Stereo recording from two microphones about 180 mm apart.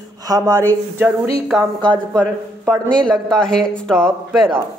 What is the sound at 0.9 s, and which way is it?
Speech, 10° right (ahead or behind).